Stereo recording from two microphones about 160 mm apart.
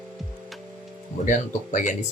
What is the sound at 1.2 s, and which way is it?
Speech, 50° left (ahead or behind).